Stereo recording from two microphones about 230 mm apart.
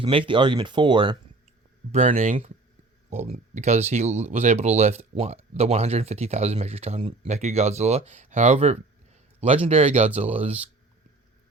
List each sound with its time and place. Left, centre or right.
0.0 s speech: right
1.9 s speech: right